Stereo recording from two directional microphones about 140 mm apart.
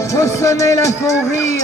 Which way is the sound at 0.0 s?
20° left (ahead or behind).